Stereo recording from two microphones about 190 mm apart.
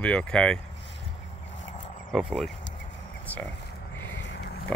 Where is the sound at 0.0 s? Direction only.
5° left (ahead or behind).